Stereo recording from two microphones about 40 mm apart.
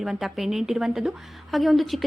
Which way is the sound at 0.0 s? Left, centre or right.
Centre.